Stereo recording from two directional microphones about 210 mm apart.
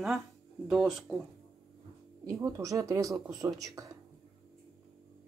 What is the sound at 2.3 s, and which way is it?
Speech, 15° right (ahead or behind).